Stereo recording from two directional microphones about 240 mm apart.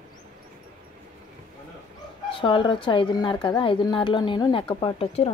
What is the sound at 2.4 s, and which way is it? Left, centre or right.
A woman's voice, centre.